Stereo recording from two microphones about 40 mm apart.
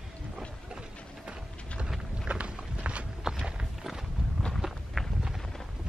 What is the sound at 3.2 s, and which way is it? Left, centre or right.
Walk, centre.